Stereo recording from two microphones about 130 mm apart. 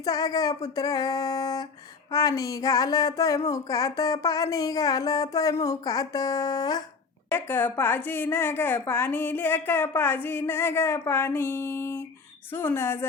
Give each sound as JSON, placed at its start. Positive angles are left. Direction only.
{"t": 0.0, "sound": "speech", "side_deg": 30}
{"t": 7.3, "sound": "a woman's voice", "side_deg": 15}